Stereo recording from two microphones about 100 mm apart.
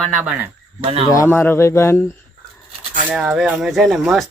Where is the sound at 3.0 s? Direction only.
10° right (ahead or behind).